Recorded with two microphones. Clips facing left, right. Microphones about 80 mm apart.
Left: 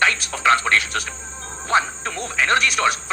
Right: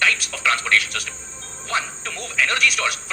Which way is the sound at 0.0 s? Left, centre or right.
Left.